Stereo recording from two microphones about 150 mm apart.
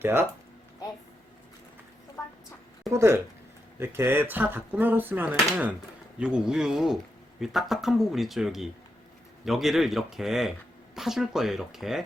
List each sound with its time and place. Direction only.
0.0 s speech: 15° right (ahead or behind)
2.2 s chicken: 20° left (ahead or behind)
2.9 s speech: 15° right (ahead or behind)